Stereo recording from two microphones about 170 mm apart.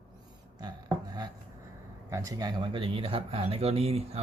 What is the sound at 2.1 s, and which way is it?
Speech, 20° right (ahead or behind).